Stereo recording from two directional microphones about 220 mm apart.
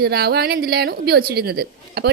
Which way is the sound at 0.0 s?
45° right (ahead or behind).